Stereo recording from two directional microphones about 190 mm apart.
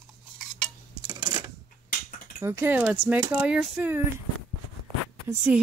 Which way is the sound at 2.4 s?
15° right (ahead or behind).